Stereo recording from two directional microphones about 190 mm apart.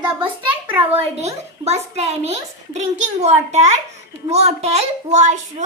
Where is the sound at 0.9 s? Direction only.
35° right (ahead or behind).